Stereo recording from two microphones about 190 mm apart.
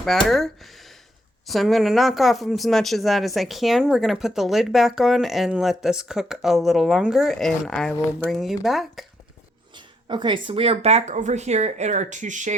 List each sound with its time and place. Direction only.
0.0 s speech: centre (ahead or behind)
7.9 s speech: 15° left (ahead or behind)
8.3 s speech: centre (ahead or behind)
9.7 s speech: 25° right (ahead or behind); by 12.5 s 40° right (ahead or behind)